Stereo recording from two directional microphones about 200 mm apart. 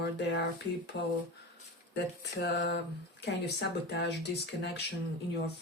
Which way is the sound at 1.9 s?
55° left (ahead or behind).